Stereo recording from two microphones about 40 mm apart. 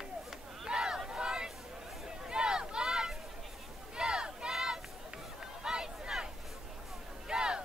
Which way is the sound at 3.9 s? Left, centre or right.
Centre.